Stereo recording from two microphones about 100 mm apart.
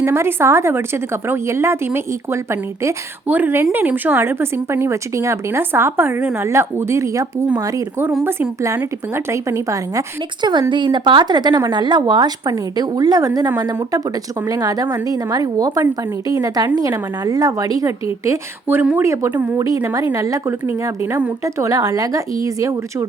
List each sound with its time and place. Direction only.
0.0 s a woman's voice: 25° right (ahead or behind)
8.2 s a woman's voice: 25° right (ahead or behind)
10.4 s a woman's voice: 50° right (ahead or behind)
18.7 s a woman's voice: 20° right (ahead or behind); by 23.0 s 35° right (ahead or behind)